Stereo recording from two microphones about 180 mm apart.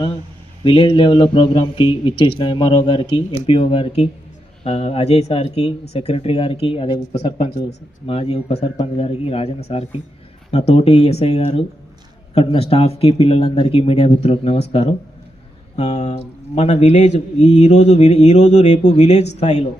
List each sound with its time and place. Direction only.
0.6 s speech: 30° left (ahead or behind)